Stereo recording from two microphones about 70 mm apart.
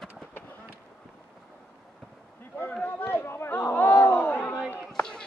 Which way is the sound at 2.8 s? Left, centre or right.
Left.